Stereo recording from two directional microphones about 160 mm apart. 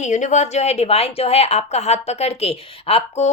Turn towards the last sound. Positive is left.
turn(degrees=40)  # may be behind; listen again after turning